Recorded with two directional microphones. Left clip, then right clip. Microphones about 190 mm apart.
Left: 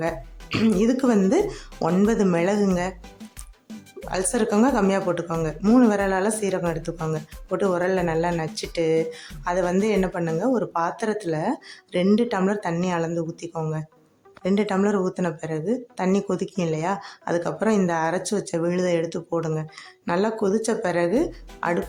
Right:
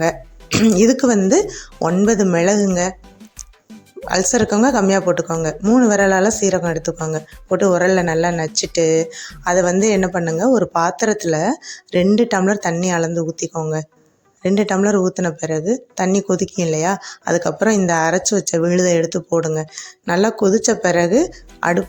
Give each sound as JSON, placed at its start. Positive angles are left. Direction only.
{"t": 0.5, "sound": "speech", "side_deg": -30}
{"t": 4.0, "sound": "speech", "side_deg": -25}